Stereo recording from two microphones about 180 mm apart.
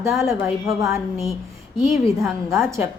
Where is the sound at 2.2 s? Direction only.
Centre (ahead or behind).